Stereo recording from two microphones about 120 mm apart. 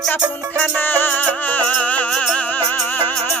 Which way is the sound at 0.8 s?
15° left (ahead or behind).